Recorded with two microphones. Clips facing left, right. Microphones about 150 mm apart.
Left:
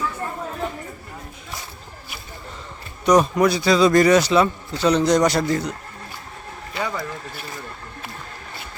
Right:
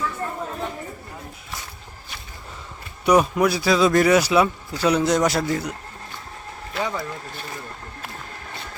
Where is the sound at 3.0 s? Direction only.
5° right (ahead or behind).